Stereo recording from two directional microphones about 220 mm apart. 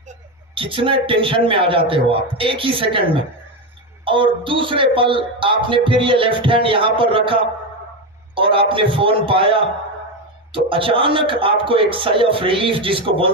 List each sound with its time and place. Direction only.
0.6 s a man's voice: 25° right (ahead or behind)